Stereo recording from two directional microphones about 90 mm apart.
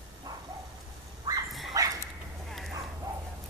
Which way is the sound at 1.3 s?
45° right (ahead or behind).